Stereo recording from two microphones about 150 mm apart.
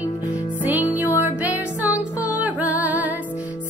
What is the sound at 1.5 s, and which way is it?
Music, 20° left (ahead or behind).